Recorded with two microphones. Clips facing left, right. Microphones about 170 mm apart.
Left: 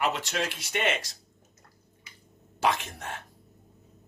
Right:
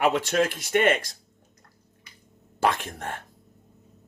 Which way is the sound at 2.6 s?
55° right (ahead or behind).